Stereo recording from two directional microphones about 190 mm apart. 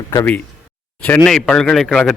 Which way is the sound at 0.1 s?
15° left (ahead or behind).